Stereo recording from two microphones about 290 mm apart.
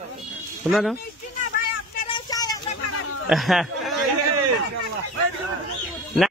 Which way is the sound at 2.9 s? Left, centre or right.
Left.